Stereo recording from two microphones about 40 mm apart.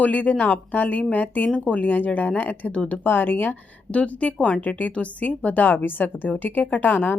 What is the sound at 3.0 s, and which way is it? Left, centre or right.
Speech, left.